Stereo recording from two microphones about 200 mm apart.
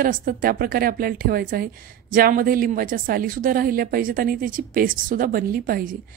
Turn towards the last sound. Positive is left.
turn(degrees=-45)  # may be behind; listen again after turning